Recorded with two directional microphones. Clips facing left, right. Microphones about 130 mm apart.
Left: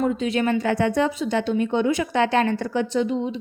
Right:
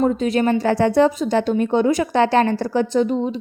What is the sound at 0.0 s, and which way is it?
A woman's voice, 40° right (ahead or behind).